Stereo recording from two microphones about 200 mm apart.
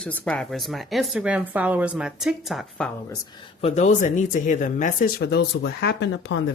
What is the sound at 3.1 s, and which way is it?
Speech, 20° left (ahead or behind).